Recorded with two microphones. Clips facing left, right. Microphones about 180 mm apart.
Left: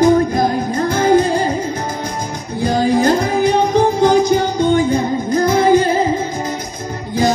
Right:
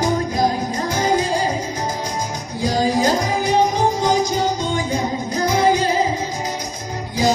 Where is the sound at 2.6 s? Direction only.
55° left (ahead or behind).